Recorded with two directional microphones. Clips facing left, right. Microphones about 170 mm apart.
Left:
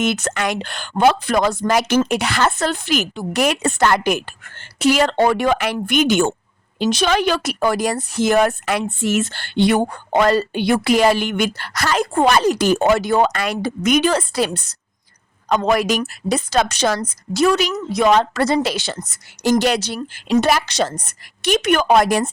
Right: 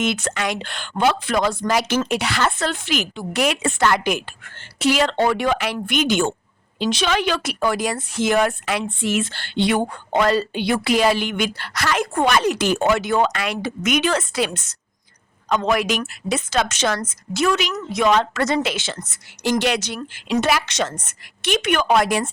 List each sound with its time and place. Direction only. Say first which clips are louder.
0.0 s a woman's voice: left 2 dB; 45° left (ahead or behind)